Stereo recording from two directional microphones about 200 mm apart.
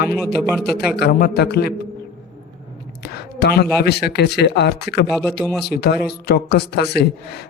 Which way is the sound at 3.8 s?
55° left (ahead or behind).